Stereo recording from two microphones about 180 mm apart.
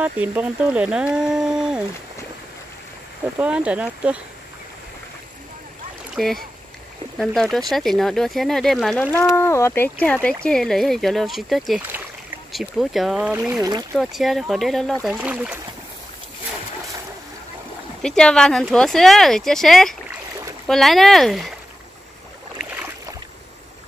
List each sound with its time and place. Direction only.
0.0 s speech: 10° right (ahead or behind)
3.3 s speech: 5° right (ahead or behind)
6.1 s speech: centre (ahead or behind)
13.6 s speech: 20° right (ahead or behind)
13.9 s speech: centre (ahead or behind)
18.0 s speech: 5° left (ahead or behind)